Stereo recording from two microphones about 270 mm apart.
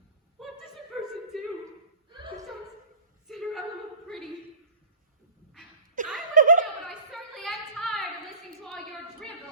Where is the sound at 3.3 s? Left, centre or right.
Centre.